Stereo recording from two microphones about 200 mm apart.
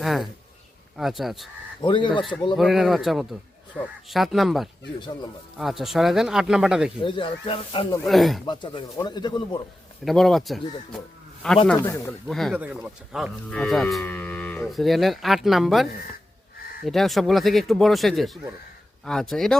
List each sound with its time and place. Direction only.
0.0 s speech: centre (ahead or behind)
1.8 s speech: 25° left (ahead or behind)
2.6 s speech: centre (ahead or behind)
7.0 s speech: 25° left (ahead or behind)
8.0 s speech: centre (ahead or behind)
8.4 s speech: 20° left (ahead or behind)
10.0 s a man's voice: centre (ahead or behind)
12.3 s speech: centre (ahead or behind)